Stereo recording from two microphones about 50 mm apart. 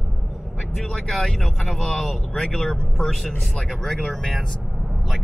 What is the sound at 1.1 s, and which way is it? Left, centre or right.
Speech, centre.